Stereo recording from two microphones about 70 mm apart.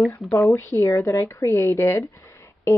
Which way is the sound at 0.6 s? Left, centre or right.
Left.